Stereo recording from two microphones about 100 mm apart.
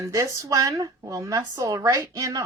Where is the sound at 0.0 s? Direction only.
30° right (ahead or behind).